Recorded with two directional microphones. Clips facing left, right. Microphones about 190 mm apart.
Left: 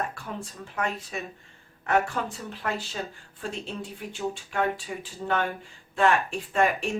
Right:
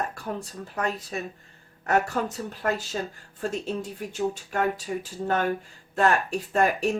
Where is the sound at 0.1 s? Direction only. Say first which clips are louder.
Right 4 dB; 40° right (ahead or behind).